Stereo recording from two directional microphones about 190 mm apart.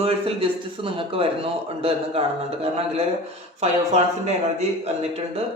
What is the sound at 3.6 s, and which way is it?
Speech, 35° right (ahead or behind).